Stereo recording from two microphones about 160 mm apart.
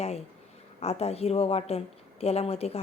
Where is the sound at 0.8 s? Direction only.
40° left (ahead or behind).